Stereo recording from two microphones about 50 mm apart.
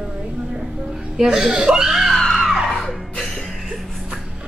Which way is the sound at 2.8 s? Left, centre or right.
Centre.